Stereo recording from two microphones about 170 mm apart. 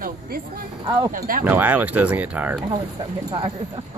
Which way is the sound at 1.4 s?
10° right (ahead or behind).